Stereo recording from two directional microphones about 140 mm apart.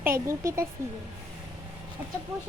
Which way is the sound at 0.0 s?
20° right (ahead or behind).